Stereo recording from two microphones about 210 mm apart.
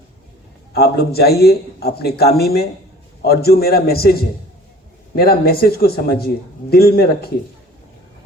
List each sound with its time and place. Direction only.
0.7 s a man's voice: 50° left (ahead or behind)